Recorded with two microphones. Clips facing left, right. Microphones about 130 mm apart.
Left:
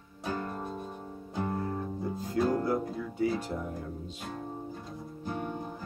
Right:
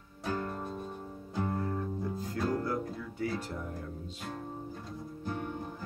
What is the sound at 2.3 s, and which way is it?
Music, 20° left (ahead or behind).